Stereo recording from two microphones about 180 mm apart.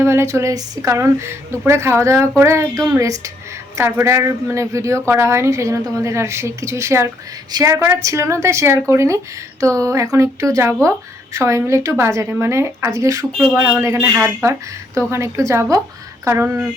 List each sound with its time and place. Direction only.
0.0 s a woman's voice: 15° right (ahead or behind)